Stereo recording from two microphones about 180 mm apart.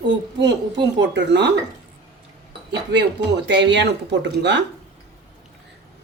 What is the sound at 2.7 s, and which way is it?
Speech, 70° right (ahead or behind).